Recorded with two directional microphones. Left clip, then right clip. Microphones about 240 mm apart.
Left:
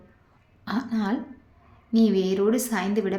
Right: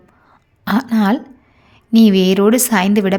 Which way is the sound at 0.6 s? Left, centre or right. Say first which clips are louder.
Right 12 dB; right.